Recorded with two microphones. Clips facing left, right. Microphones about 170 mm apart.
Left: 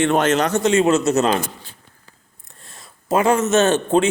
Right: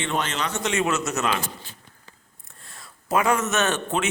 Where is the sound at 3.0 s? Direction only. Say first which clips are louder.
Left 5 dB; 25° left (ahead or behind).